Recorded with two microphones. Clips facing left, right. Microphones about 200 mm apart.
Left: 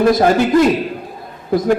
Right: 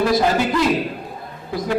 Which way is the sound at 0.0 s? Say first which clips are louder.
Left 5 dB; 50° left (ahead or behind).